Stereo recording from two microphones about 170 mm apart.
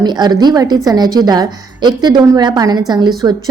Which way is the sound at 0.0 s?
25° right (ahead or behind).